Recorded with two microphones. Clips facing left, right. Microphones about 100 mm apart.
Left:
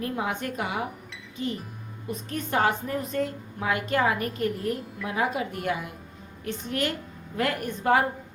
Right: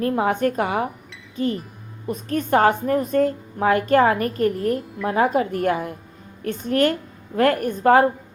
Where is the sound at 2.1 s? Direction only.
50° right (ahead or behind).